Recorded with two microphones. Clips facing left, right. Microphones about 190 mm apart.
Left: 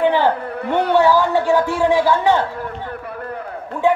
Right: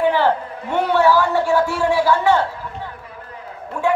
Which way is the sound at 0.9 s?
15° left (ahead or behind).